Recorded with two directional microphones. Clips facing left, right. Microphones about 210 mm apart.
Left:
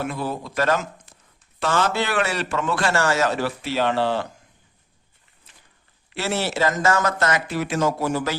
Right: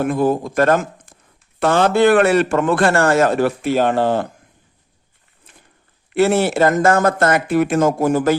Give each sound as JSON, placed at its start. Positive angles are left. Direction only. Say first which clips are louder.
{"t": 0.0, "sound": "speech", "louder": "right 10 dB", "side_deg": -50}
{"t": 5.5, "sound": "a sound", "louder": "right 7 dB", "side_deg": -50}
{"t": 6.1, "sound": "speech", "louder": "right 10 dB", "side_deg": -55}